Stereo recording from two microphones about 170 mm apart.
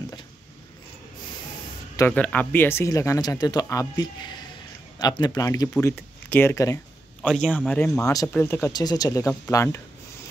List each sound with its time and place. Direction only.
2.0 s speech: 10° left (ahead or behind)
7.2 s speech: 5° left (ahead or behind)
8.0 s speech: 20° left (ahead or behind)